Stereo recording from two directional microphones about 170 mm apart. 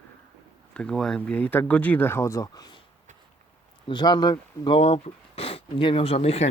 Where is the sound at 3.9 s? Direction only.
25° left (ahead or behind).